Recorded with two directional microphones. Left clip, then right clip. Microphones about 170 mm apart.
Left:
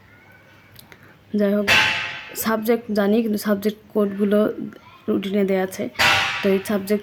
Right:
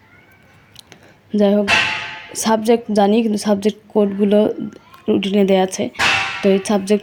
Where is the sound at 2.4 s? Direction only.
10° right (ahead or behind).